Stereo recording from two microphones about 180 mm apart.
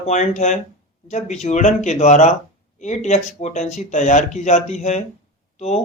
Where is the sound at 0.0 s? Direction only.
40° left (ahead or behind).